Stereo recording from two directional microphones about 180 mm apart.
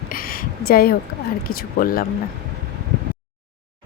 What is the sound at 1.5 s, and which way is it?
Speech, 55° left (ahead or behind).